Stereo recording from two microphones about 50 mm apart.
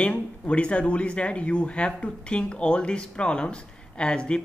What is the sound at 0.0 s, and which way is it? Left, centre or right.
Speech, left.